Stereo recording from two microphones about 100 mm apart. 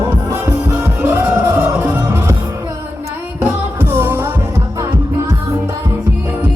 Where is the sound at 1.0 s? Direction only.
25° right (ahead or behind).